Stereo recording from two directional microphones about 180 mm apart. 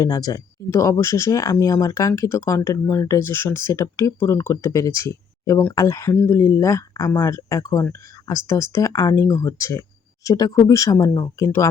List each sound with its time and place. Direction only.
0.0 s speech: 20° left (ahead or behind)